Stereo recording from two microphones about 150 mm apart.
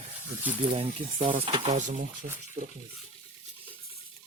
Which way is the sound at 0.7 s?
40° right (ahead or behind).